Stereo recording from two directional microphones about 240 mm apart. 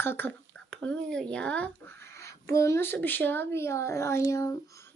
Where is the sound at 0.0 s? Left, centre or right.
Centre.